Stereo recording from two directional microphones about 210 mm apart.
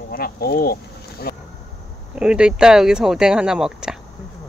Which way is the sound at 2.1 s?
5° right (ahead or behind).